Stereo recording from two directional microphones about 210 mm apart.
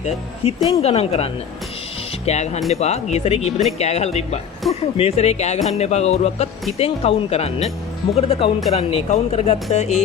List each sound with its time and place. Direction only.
0.0 s speech: 30° left (ahead or behind)